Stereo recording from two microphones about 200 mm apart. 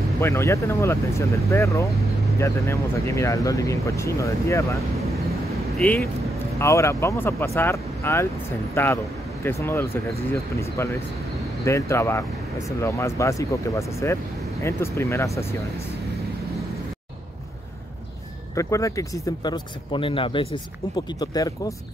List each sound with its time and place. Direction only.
0.2 s speech: 15° left (ahead or behind)
6.6 s speech: 15° left (ahead or behind)
18.5 s speech: 15° left (ahead or behind)